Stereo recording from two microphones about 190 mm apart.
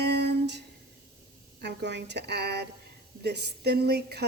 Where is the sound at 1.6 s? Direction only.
65° right (ahead or behind).